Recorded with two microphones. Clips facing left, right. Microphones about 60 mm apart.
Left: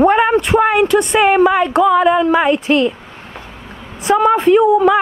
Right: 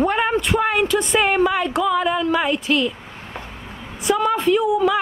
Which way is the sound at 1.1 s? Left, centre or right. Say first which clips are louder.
Left 6 dB; left.